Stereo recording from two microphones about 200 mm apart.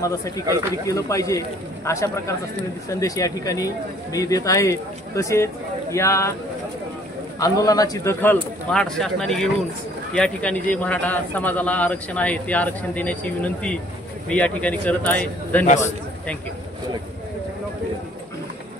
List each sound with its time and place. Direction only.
0.0 s a man's voice: 15° left (ahead or behind)
7.3 s a man's voice: 20° left (ahead or behind)
15.6 s a man's voice: 35° left (ahead or behind)